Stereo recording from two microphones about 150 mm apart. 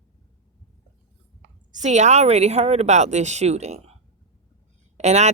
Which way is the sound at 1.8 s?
50° right (ahead or behind).